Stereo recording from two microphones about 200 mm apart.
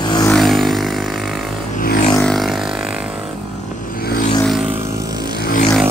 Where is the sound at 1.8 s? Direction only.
45° left (ahead or behind).